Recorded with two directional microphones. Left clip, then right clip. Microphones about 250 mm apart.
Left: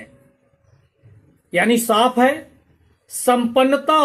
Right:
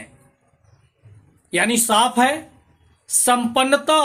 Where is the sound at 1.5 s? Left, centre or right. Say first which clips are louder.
Left 2 dB; centre.